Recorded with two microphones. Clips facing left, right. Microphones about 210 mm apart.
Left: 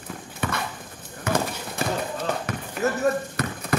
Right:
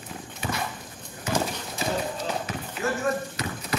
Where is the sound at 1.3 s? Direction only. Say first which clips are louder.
Left 3 dB; 60° left (ahead or behind).